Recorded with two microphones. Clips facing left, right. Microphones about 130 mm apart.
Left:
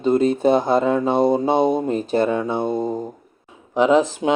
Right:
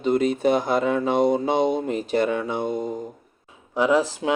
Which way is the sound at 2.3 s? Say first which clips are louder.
Left 4 dB; 20° left (ahead or behind).